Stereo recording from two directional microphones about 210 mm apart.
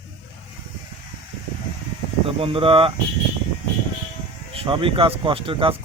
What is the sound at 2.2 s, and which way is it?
Speech, 25° right (ahead or behind).